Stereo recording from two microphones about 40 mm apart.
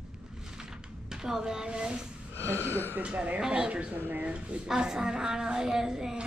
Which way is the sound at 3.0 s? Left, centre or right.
Right.